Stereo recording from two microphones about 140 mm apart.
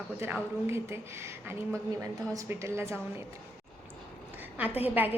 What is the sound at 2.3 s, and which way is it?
Speech, 20° right (ahead or behind).